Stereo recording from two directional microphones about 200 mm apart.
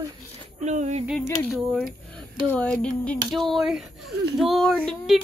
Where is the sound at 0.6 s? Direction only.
35° right (ahead or behind).